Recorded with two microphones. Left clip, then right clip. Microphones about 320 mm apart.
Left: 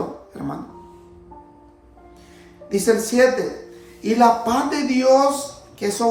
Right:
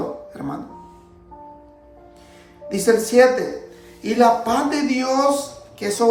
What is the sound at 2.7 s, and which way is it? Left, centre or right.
Speech, centre.